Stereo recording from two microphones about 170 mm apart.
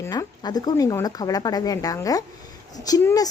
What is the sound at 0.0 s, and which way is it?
A woman's voice, 20° left (ahead or behind).